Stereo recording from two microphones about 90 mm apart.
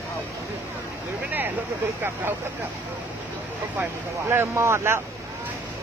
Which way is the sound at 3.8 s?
25° right (ahead or behind).